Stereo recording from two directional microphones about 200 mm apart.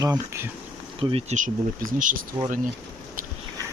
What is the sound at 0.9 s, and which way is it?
Speech, 30° right (ahead or behind).